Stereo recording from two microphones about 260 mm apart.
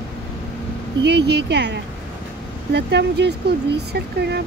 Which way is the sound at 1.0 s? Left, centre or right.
Right.